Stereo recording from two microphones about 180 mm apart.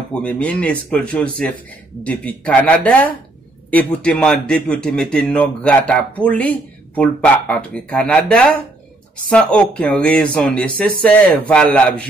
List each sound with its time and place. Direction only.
0.1 s a man's voice: 5° left (ahead or behind)